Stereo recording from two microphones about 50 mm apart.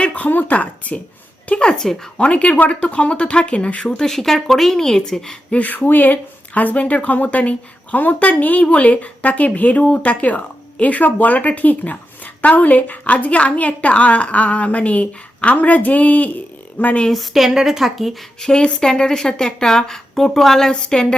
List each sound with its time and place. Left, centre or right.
0.0 s speech: left
0.3 s speech: left
0.5 s speech: left
1.5 s a woman's voice: centre
2.1 s speech: left
4.0 s a woman's voice: centre
5.5 s speech: left
17.1 s a woman's voice: centre
18.3 s a woman's voice: centre
20.9 s a woman's voice: centre